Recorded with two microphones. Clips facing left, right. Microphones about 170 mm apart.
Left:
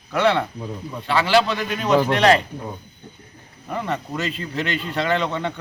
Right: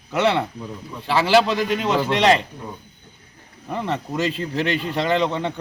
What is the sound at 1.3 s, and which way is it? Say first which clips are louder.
A man's voice: right 3 dB; 25° right (ahead or behind).